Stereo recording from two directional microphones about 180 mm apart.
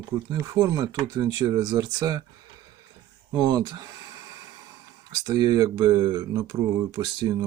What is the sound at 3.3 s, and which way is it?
Speech, 20° right (ahead or behind).